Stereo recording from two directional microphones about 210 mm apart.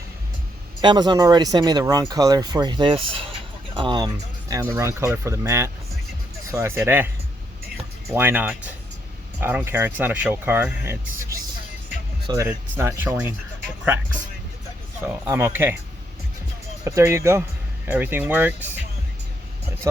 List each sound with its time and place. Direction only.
0.8 s speech: 20° right (ahead or behind)
8.1 s speech: 10° right (ahead or behind)
15.0 s speech: 15° right (ahead or behind)
16.8 s speech: 15° right (ahead or behind)